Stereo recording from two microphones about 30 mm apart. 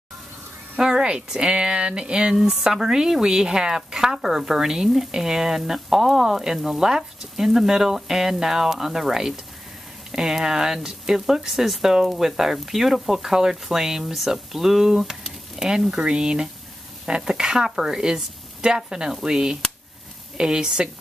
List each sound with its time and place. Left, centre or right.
0.7 s a sound: right
1.5 s speech: right
2.3 s speech: centre
15.6 s speech: right